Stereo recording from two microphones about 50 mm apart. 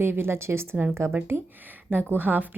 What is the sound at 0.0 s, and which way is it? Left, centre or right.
A woman's voice, right.